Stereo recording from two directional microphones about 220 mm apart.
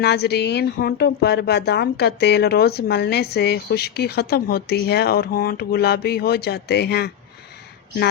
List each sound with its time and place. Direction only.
0.0 s a woman's voice: 50° left (ahead or behind)